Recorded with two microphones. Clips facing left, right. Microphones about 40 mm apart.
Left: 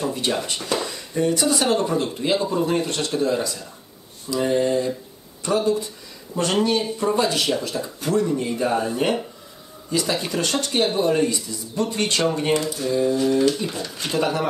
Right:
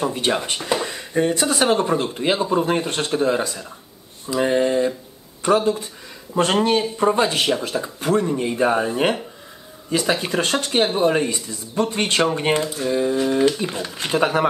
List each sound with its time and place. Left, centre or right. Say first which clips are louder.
0.0 s speech: right 3 dB; right